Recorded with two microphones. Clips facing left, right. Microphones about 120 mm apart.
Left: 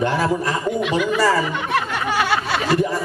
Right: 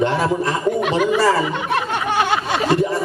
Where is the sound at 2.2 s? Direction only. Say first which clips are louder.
Right 1 dB; 20° right (ahead or behind).